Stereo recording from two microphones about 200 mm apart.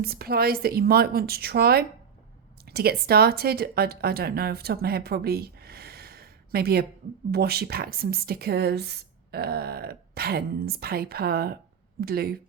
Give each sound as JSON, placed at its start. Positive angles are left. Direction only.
{"t": 0.0, "sound": "speech", "side_deg": -50}